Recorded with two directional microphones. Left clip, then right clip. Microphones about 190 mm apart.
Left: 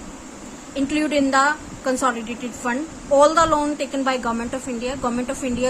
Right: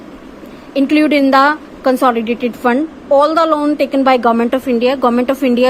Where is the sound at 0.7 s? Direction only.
35° right (ahead or behind).